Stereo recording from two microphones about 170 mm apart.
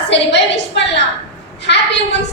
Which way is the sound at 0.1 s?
90° left.